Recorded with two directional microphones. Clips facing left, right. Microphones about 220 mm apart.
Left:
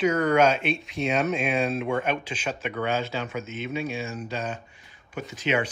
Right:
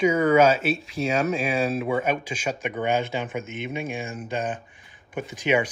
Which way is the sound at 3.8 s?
50° right (ahead or behind).